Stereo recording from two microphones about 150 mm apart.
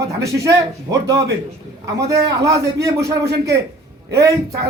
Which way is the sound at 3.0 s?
90° right.